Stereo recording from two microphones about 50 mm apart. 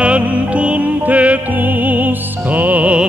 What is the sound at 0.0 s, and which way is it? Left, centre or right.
Music, right.